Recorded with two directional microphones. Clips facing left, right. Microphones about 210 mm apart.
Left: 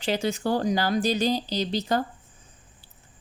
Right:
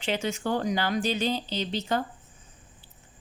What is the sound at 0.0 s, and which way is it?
A woman's voice, 35° left (ahead or behind).